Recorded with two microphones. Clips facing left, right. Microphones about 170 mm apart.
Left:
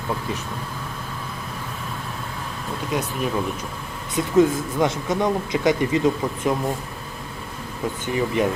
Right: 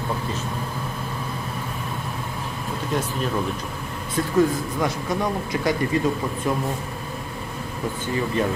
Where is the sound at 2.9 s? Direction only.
10° left (ahead or behind).